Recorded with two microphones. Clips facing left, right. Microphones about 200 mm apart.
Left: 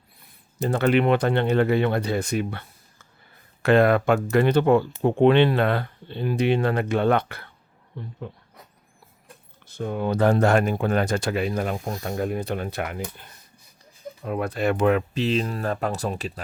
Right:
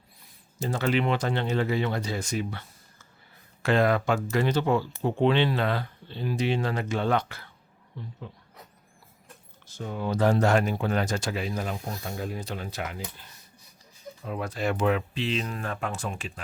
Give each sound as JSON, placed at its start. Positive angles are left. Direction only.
{"t": 0.6, "sound": "speech", "side_deg": 60}
{"t": 9.6, "sound": "speech", "side_deg": 60}
{"t": 14.3, "sound": "speech", "side_deg": 60}